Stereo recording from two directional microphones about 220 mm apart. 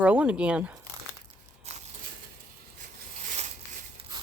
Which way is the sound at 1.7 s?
30° right (ahead or behind).